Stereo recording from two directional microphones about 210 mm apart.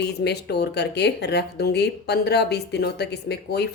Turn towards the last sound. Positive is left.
turn(degrees=50)  # may be behind; listen again after turning